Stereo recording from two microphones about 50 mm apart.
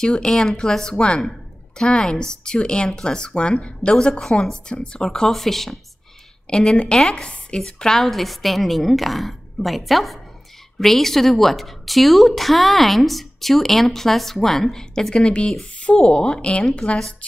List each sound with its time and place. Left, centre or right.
0.0 s a woman's voice: centre
6.5 s a woman's voice: centre
15.8 s speech: left